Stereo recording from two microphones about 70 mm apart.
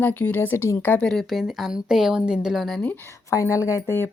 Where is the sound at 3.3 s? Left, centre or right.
Left.